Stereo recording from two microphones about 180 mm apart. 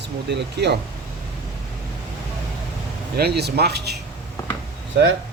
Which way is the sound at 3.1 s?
65° right (ahead or behind).